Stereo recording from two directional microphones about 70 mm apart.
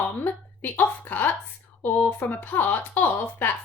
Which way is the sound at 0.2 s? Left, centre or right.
Left.